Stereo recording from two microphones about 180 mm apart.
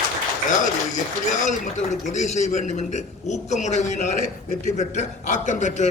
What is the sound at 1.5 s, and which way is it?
A man's voice, 40° left (ahead or behind).